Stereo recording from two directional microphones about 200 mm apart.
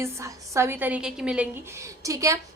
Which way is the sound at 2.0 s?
15° right (ahead or behind).